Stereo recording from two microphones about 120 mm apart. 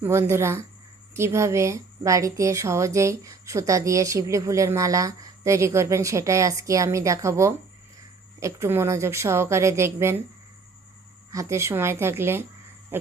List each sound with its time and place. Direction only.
0.0 s a woman's voice: 20° right (ahead or behind)
11.3 s a woman's voice: 25° right (ahead or behind)
12.9 s a sound: 20° right (ahead or behind)